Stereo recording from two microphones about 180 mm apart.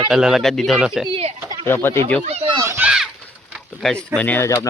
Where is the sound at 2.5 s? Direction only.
20° right (ahead or behind).